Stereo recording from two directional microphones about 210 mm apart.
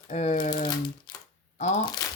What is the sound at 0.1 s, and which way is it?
Speech, 35° left (ahead or behind).